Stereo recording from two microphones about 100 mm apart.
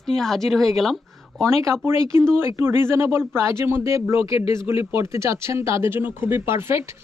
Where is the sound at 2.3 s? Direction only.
25° right (ahead or behind).